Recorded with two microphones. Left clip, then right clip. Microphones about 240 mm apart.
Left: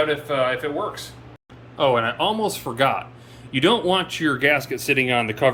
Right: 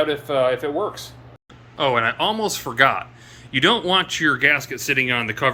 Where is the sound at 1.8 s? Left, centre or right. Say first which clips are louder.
Even; centre.